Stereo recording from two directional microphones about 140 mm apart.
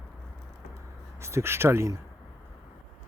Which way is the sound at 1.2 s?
20° right (ahead or behind).